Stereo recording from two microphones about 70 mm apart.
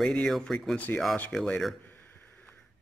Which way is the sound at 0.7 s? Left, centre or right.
Left.